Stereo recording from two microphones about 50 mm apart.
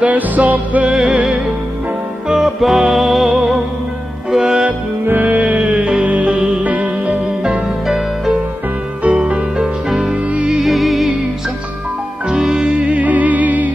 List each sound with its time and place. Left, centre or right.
0.0 s music: right
0.8 s music: centre
2.2 s music: centre
4.6 s music: right
7.1 s music: centre
9.0 s music: right
9.6 s music: centre
10.6 s music: centre
12.3 s music: centre
13.0 s music: right